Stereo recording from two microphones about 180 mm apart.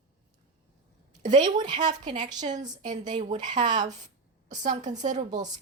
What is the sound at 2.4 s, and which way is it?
Speech, 45° right (ahead or behind).